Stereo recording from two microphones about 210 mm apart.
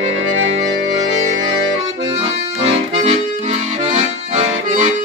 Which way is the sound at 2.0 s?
25° right (ahead or behind).